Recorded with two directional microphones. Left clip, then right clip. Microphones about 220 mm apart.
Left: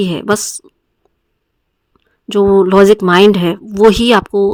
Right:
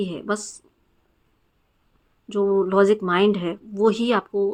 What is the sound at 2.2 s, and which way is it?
Speech, 55° left (ahead or behind).